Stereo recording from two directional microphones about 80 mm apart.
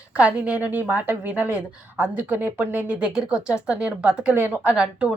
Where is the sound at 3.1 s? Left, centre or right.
Centre.